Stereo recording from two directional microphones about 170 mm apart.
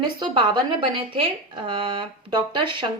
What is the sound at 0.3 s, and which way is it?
A woman's voice, 30° right (ahead or behind).